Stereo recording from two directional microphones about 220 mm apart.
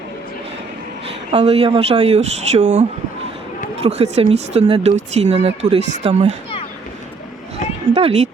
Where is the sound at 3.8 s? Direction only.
30° right (ahead or behind).